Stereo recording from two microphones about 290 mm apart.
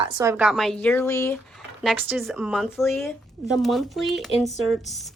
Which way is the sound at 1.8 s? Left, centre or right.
Centre.